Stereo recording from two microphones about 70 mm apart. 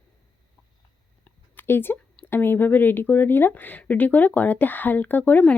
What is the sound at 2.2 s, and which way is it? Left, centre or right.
Speech, left.